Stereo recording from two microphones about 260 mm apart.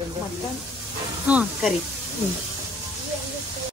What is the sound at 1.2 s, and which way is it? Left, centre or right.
Speech, centre.